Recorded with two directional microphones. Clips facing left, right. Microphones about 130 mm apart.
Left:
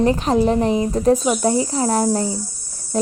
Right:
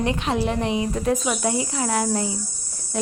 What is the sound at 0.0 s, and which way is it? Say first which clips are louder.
Speech: left 7 dB; 40° left (ahead or behind).